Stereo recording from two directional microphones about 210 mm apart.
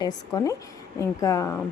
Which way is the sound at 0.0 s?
20° left (ahead or behind).